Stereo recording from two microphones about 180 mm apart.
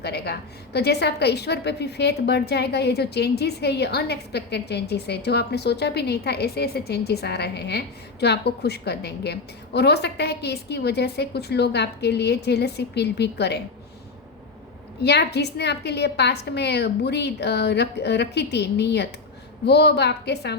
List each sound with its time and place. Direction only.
0.0 s a woman's voice: 65° left (ahead or behind)
15.0 s a woman's voice: 65° left (ahead or behind)